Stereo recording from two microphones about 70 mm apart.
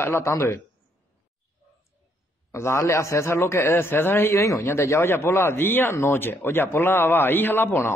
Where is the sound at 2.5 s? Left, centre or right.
Left.